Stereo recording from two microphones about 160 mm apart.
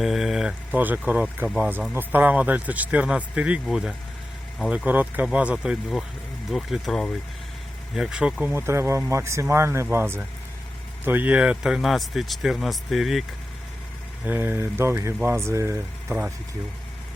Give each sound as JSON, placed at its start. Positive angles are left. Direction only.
{"t": 0.0, "sound": "a man's voice", "side_deg": 0}
{"t": 14.3, "sound": "speech", "side_deg": -10}